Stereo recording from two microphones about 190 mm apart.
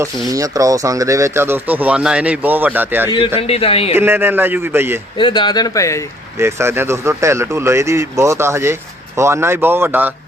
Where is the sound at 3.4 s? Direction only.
30° left (ahead or behind).